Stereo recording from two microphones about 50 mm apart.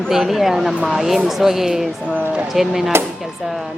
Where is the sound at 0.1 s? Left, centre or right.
Centre.